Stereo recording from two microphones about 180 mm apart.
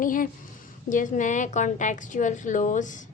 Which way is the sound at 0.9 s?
45° left (ahead or behind).